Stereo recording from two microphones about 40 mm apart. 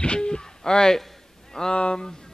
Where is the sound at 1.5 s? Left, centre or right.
Centre.